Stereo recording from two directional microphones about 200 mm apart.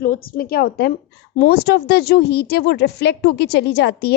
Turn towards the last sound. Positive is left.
turn(degrees=55)  # may be behind; listen again after turning